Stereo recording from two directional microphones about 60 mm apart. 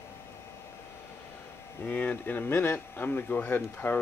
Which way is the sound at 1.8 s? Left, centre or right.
Left.